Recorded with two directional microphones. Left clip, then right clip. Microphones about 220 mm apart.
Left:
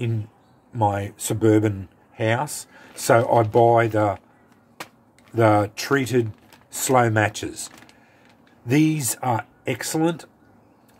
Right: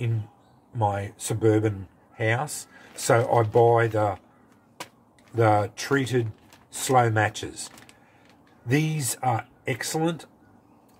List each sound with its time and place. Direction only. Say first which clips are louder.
0.7 s speech: left 4 dB; 40° left (ahead or behind)
5.3 s speech: left 3 dB; 40° left (ahead or behind)
8.6 s speech: left 6 dB; 40° left (ahead or behind)